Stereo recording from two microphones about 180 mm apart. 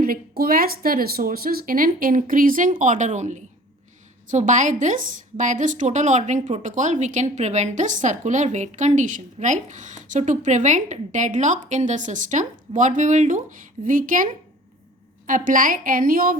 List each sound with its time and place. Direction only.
0.0 s a woman's voice: 55° right (ahead or behind)
15.3 s a woman's voice: 50° right (ahead or behind)